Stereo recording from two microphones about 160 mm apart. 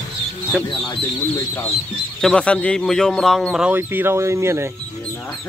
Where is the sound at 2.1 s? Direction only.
5° left (ahead or behind).